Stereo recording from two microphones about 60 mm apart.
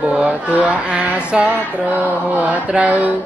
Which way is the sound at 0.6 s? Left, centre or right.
Right.